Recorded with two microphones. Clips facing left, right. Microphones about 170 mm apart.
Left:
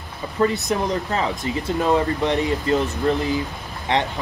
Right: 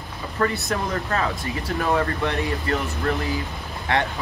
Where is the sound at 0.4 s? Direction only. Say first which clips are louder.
Left 4 dB; 20° left (ahead or behind).